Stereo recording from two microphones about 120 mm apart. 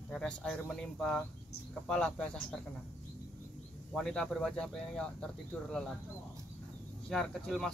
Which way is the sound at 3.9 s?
5° left (ahead or behind).